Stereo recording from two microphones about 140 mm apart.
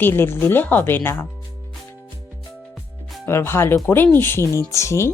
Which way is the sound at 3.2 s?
15° left (ahead or behind).